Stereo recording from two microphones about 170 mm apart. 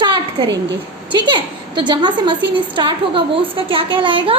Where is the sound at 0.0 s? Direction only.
25° right (ahead or behind).